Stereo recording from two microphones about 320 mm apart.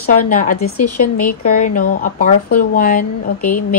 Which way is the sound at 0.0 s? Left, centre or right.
Left.